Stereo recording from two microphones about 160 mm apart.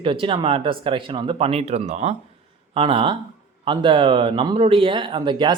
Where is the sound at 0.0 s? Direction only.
30° right (ahead or behind).